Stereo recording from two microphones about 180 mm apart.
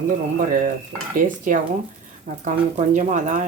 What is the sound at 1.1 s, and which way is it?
Dishes, 50° right (ahead or behind).